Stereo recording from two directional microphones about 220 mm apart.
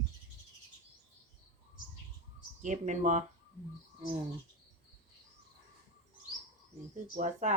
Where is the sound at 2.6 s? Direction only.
35° right (ahead or behind).